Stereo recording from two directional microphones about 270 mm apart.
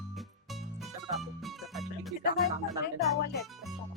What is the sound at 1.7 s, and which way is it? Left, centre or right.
Music, centre.